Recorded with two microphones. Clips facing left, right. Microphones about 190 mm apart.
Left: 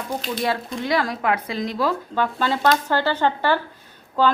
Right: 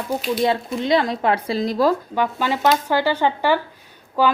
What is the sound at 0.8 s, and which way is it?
Speech, 20° right (ahead or behind).